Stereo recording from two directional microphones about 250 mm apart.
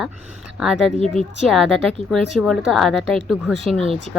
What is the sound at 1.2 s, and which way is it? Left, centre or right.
Speech, right.